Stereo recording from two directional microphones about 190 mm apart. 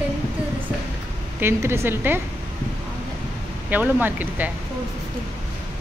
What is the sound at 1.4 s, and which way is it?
Speech, 10° right (ahead or behind).